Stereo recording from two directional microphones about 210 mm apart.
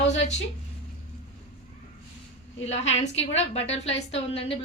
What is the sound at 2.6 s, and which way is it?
A woman's voice, 30° left (ahead or behind).